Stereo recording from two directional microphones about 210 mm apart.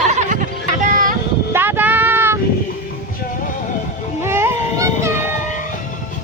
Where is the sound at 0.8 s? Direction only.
40° right (ahead or behind).